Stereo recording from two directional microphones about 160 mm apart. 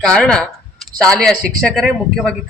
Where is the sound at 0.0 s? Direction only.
5° left (ahead or behind).